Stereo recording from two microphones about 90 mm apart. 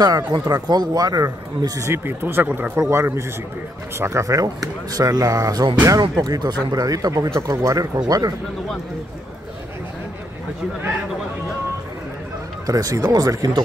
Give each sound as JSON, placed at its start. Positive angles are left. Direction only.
{"t": 0.3, "sound": "speech", "side_deg": -50}
{"t": 1.9, "sound": "speech", "side_deg": -25}
{"t": 12.6, "sound": "speech", "side_deg": -40}